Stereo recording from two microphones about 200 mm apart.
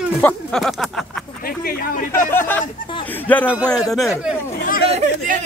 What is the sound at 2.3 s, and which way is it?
A man's voice, 10° left (ahead or behind).